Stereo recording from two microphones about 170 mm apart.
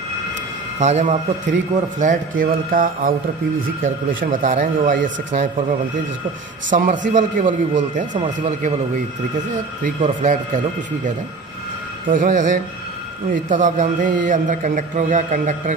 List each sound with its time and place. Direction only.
0.7 s a man's voice: 45° right (ahead or behind)
9.8 s a man's voice: 45° right (ahead or behind)
12.1 s a man's voice: 50° right (ahead or behind)